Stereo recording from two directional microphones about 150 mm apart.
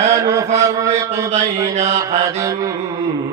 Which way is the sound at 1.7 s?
50° right (ahead or behind).